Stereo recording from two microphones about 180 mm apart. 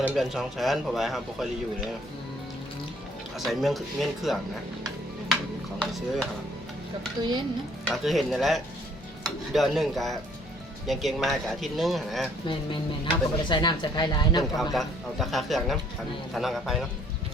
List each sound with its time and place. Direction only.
0.1 s speech: centre (ahead or behind)
3.3 s speech: centre (ahead or behind)
5.8 s speech: 5° left (ahead or behind)
7.2 s a child's voice: 25° right (ahead or behind)
7.9 s speech: centre (ahead or behind)
9.2 s stir: centre (ahead or behind)
10.8 s speech: centre (ahead or behind)
13.4 s speech: 25° left (ahead or behind)
14.7 s speech: centre (ahead or behind)